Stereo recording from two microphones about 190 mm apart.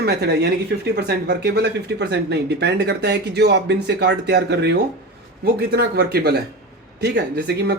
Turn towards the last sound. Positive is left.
turn(degrees=-60)  # may be behind; listen again after turning